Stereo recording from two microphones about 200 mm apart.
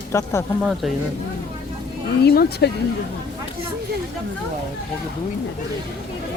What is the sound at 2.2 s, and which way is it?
Speech, 55° left (ahead or behind).